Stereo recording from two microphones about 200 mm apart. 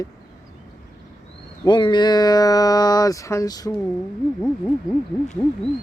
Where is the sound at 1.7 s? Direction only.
20° left (ahead or behind).